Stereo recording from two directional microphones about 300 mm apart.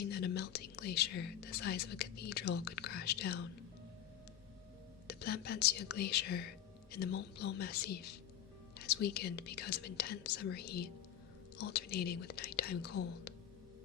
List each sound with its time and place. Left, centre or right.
0.1 s speech: left
5.0 s speech: left